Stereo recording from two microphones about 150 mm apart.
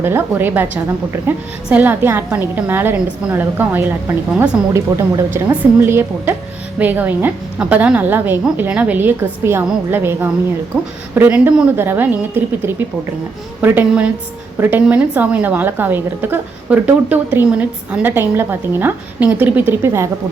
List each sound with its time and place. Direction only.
0.0 s a woman's voice: 15° right (ahead or behind)
4.7 s a woman's voice: 20° right (ahead or behind)
13.6 s a woman's voice: 10° right (ahead or behind)